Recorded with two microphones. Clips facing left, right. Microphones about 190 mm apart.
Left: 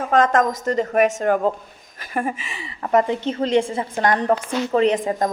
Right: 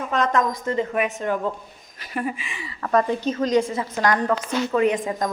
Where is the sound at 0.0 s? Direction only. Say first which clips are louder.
Left 5 dB; 50° left (ahead or behind).